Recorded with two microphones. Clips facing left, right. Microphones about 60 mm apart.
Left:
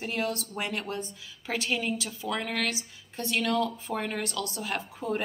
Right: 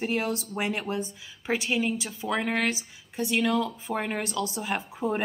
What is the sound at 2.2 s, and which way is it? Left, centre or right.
Speech, right.